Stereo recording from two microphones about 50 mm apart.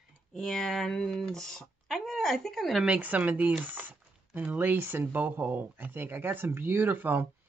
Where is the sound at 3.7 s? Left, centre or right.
Right.